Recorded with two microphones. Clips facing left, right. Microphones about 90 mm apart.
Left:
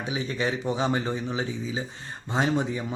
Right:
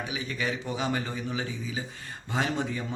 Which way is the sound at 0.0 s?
30° left (ahead or behind).